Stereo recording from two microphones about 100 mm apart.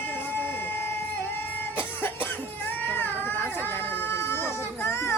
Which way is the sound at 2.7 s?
20° left (ahead or behind).